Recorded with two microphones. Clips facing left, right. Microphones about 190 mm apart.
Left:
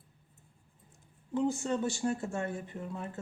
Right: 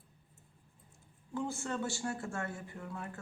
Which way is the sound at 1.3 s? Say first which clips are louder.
Left 7 dB; 20° left (ahead or behind).